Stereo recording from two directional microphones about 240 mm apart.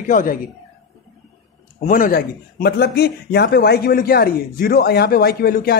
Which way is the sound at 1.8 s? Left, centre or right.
Left.